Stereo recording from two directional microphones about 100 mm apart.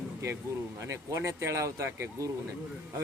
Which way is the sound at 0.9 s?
30° right (ahead or behind).